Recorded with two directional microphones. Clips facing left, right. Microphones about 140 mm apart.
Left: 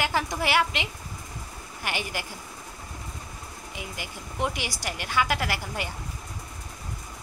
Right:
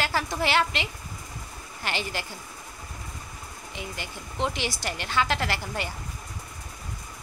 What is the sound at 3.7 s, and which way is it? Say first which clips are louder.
A woman's voice: right 2 dB; 10° left (ahead or behind).